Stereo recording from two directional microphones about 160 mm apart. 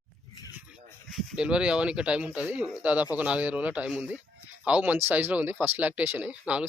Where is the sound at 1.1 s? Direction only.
5° right (ahead or behind).